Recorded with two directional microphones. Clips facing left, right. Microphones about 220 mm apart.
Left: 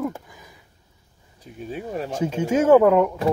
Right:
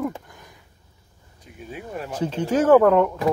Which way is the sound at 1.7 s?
30° left (ahead or behind).